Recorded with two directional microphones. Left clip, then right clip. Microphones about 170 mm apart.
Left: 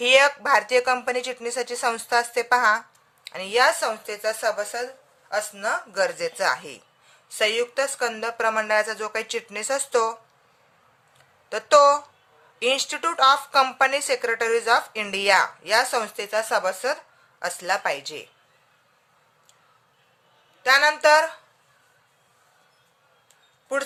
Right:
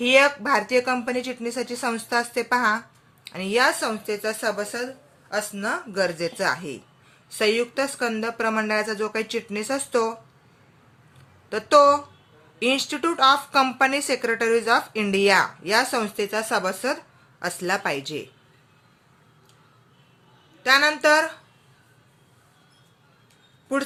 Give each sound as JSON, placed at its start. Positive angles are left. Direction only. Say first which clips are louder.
{"t": 0.0, "sound": "speech", "louder": "even", "side_deg": 25}
{"t": 11.4, "sound": "a woman's voice", "louder": "even", "side_deg": 20}
{"t": 20.6, "sound": "speech", "louder": "left 1 dB", "side_deg": 20}